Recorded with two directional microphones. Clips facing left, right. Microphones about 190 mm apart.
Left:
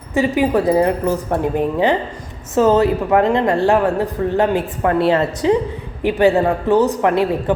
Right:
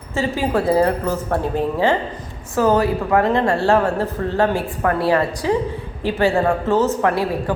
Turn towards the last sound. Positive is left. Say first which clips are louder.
# left 3 dB
turn(degrees=20)  # may be behind; listen again after turning